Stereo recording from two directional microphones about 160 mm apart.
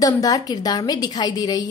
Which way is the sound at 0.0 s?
25° left (ahead or behind).